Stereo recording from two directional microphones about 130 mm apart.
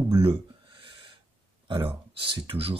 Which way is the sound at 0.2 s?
45° right (ahead or behind).